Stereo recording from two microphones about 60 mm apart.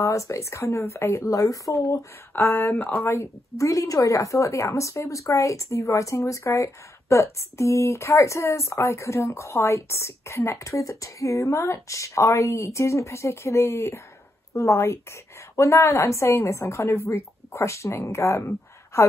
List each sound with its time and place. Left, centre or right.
0.0 s speech: left
2.4 s speech: left
3.1 s a woman's voice: left